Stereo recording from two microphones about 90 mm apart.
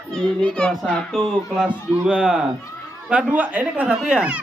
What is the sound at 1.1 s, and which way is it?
A man's voice, 5° right (ahead or behind).